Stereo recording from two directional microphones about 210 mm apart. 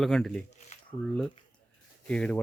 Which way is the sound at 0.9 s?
15° left (ahead or behind).